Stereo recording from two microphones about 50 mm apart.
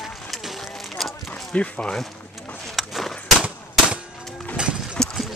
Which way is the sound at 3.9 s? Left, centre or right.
Right.